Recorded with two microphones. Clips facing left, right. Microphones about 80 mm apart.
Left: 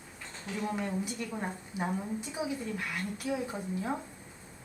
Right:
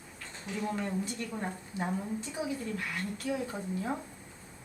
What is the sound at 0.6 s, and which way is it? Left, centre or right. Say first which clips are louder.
A woman's voice: even; centre.